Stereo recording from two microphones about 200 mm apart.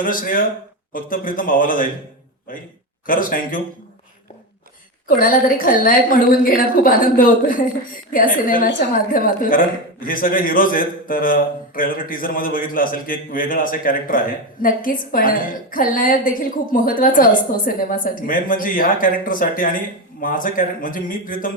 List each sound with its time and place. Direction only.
0.0 s a woman's voice: 45° left (ahead or behind)
3.1 s a woman's voice: 45° left (ahead or behind)
5.0 s a woman's voice: 45° left (ahead or behind)